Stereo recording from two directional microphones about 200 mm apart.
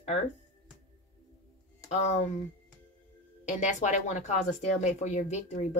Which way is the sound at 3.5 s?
35° left (ahead or behind).